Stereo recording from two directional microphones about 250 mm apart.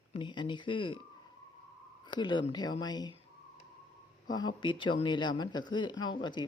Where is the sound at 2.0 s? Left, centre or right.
Centre.